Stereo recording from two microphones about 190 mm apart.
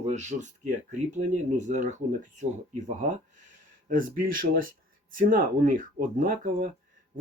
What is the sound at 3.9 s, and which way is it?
Speech, 45° right (ahead or behind).